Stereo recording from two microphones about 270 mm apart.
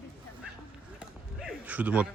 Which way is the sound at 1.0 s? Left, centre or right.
Centre.